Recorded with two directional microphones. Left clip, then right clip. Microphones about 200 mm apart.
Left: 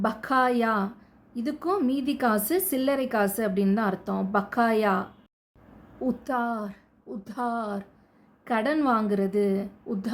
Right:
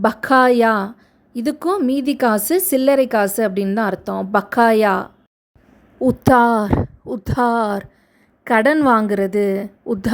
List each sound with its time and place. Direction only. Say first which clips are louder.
0.0 s a woman's voice: right 10 dB; 40° right (ahead or behind)